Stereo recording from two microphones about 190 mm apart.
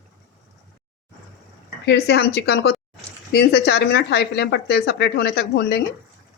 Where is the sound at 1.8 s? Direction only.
60° left (ahead or behind).